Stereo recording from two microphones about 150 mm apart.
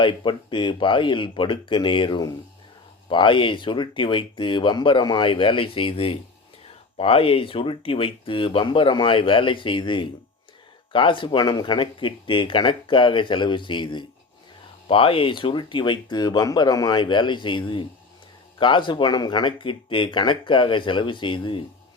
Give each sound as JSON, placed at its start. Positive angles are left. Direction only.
{"t": 0.0, "sound": "speech", "side_deg": 35}